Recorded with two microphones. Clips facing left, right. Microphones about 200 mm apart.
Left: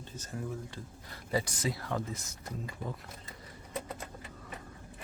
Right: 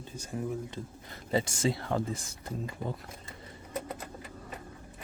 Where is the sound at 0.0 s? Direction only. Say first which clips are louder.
Right 4 dB; 10° right (ahead or behind); by 2.9 s 30° right (ahead or behind).